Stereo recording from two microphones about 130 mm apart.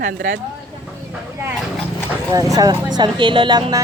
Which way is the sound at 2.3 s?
30° right (ahead or behind).